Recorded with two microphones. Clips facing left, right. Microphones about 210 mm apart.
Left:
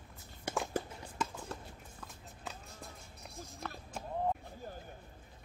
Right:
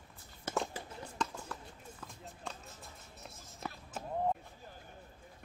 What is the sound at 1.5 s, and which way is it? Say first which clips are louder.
Clip-clop: left 2 dB; 25° left (ahead or behind).